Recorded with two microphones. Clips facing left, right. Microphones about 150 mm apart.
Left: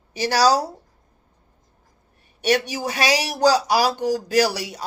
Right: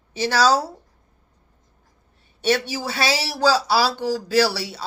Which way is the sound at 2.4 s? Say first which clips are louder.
Left 1 dB; 15° left (ahead or behind).